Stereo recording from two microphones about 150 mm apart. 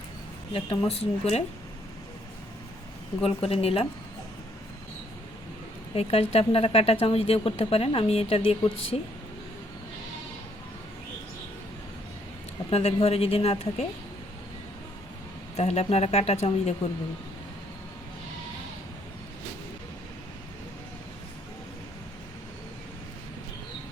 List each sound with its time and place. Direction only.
0.5 s speech: 35° left (ahead or behind)
3.2 s speech: 40° left (ahead or behind)
5.9 s speech: 40° left (ahead or behind)
12.7 s speech: 40° left (ahead or behind)
15.5 s speech: 45° left (ahead or behind)